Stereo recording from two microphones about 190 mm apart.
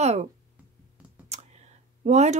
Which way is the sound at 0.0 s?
35° right (ahead or behind).